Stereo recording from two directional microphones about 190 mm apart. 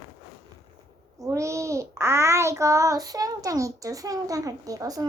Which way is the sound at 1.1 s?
15° right (ahead or behind).